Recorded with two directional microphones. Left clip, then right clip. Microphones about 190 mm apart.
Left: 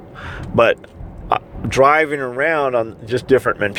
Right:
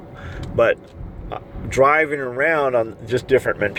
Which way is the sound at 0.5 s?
45° left (ahead or behind).